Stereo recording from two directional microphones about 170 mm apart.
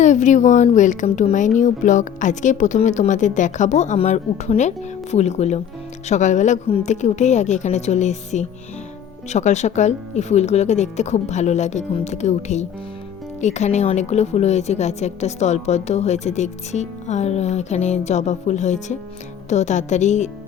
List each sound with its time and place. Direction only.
0.0 s a woman's voice: 45° left (ahead or behind)